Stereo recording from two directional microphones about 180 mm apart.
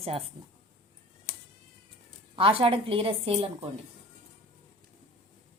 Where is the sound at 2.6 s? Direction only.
30° right (ahead or behind).